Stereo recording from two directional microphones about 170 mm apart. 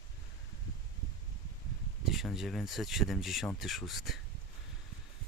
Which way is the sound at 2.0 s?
Centre (ahead or behind).